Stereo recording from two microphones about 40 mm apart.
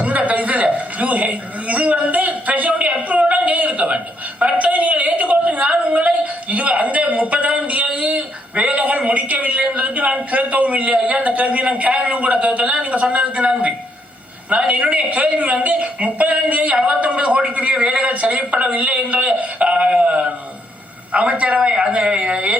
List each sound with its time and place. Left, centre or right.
0.0 s a sound: right
4.5 s a woman's voice: right
14.6 s a woman's voice: right